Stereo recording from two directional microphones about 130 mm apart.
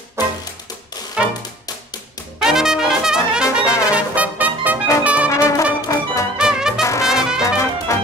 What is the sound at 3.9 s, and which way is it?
Music, 10° right (ahead or behind).